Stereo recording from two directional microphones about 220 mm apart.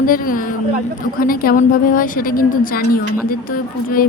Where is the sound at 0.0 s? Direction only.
40° left (ahead or behind).